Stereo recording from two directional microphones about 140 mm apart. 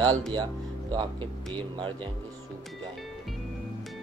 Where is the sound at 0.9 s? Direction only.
35° right (ahead or behind).